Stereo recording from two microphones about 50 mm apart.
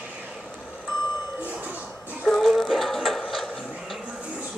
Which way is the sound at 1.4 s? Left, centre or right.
Right.